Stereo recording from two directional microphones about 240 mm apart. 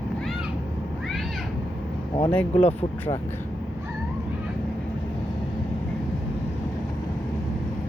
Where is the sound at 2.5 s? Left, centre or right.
Left.